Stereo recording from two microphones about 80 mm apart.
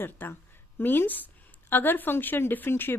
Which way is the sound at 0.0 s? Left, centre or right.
Left.